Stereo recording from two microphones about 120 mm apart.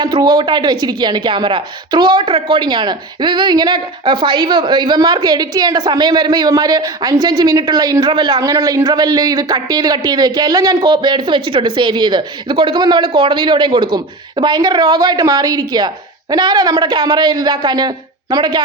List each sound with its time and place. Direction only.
0.0 s speech: 35° right (ahead or behind)